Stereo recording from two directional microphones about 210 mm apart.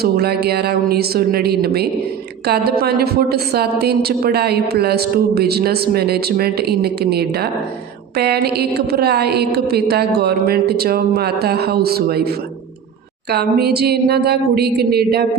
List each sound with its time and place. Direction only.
0.0 s a woman's voice: 50° right (ahead or behind)
13.3 s a woman's voice: 50° right (ahead or behind)